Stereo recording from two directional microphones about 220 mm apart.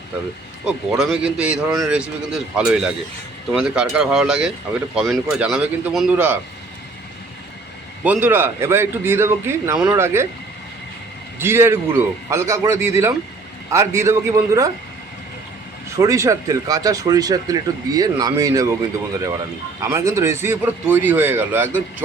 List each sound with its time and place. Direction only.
0.6 s speech: centre (ahead or behind)
8.0 s speech: 10° right (ahead or behind)
11.3 s speech: 10° right (ahead or behind)
16.0 s speech: 15° right (ahead or behind)
19.8 s speech: 15° right (ahead or behind)